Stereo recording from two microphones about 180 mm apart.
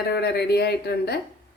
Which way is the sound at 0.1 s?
65° left (ahead or behind).